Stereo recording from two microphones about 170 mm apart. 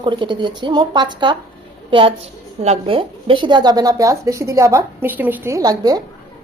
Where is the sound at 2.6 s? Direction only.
35° right (ahead or behind).